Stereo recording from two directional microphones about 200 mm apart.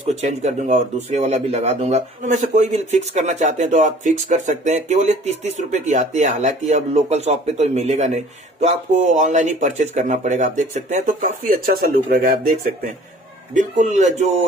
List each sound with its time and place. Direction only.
0.1 s speech: 35° right (ahead or behind)